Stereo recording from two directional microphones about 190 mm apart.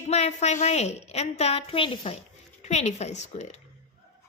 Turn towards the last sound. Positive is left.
turn(degrees=35)  # may be behind; listen again after turning